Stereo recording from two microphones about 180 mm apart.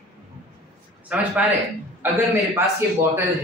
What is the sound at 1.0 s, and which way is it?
A man's voice, 5° right (ahead or behind).